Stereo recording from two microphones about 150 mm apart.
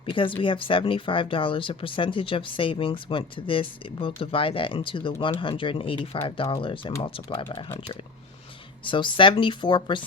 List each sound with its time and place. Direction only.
0.0 s speech: 35° left (ahead or behind)
8.8 s speech: 35° left (ahead or behind)